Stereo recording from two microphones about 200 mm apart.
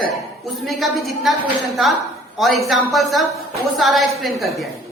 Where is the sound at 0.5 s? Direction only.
Centre (ahead or behind).